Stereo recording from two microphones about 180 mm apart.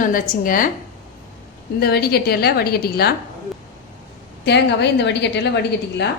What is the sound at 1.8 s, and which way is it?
A woman's voice, 60° left (ahead or behind).